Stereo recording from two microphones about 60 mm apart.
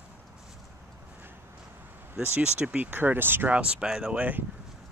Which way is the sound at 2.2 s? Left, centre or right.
Right.